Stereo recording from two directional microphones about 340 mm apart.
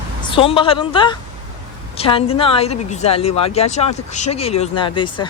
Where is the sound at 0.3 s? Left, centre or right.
Centre.